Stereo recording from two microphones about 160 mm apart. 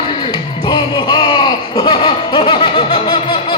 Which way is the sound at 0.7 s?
25° left (ahead or behind).